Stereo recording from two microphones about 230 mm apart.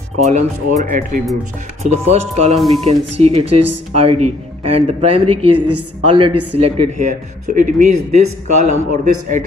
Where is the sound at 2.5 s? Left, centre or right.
Centre.